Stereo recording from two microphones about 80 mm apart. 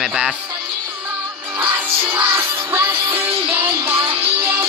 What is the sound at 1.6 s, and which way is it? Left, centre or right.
Music, centre.